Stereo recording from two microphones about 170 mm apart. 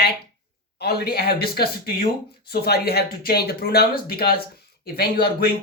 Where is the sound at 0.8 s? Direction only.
70° left (ahead or behind).